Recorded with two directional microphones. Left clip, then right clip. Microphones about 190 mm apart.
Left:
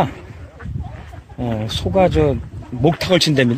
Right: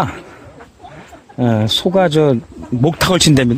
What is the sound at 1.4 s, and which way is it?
Speech, 50° right (ahead or behind).